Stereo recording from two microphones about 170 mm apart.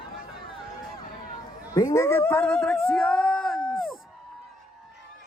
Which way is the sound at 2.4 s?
Centre (ahead or behind).